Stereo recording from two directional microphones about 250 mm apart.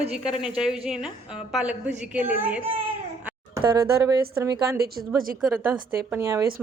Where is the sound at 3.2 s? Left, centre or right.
Centre.